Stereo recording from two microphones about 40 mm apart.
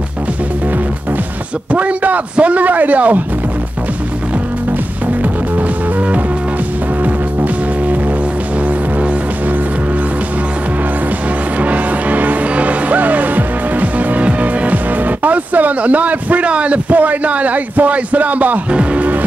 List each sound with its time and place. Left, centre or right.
1.7 s a man's voice: right
5.2 s music: right
11.6 s music: right
16.4 s a man's voice: right
18.7 s speech: right